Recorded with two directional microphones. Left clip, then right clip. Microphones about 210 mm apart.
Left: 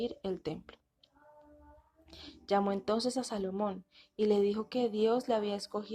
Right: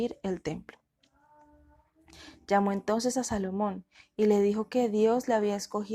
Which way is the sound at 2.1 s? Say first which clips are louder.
Right 4 dB; 35° right (ahead or behind).